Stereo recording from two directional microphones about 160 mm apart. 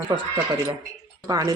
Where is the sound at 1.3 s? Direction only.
25° right (ahead or behind).